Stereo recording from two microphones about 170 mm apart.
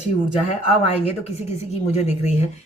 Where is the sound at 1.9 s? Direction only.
40° left (ahead or behind).